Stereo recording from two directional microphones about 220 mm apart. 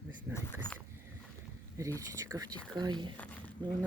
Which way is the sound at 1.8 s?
15° right (ahead or behind).